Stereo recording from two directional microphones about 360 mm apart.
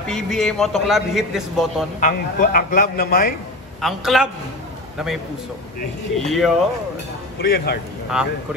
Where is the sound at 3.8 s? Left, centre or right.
Centre.